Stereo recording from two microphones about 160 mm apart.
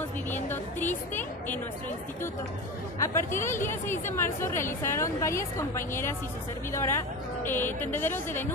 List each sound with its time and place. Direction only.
0.3 s music: 10° left (ahead or behind)
3.0 s a woman's voice: 15° left (ahead or behind)